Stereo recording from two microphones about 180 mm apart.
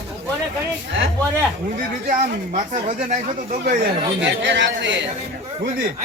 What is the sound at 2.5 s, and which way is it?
Speech, 40° right (ahead or behind).